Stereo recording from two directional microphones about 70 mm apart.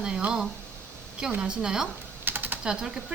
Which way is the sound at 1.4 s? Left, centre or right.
Centre.